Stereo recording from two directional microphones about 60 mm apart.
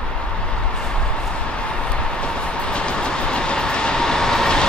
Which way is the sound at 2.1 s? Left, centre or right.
Centre.